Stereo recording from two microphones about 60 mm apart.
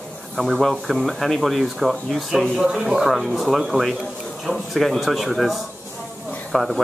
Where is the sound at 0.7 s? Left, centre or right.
Centre.